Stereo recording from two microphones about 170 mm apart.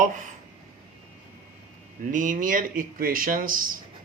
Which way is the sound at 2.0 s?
50° right (ahead or behind).